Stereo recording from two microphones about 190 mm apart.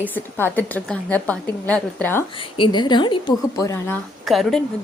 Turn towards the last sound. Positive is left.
turn(degrees=0)  # may be behind; listen again after turning